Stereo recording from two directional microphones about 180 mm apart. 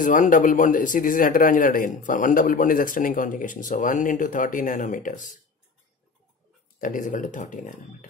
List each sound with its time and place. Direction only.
0.0 s speech: 45° left (ahead or behind)
6.8 s speech: 45° left (ahead or behind)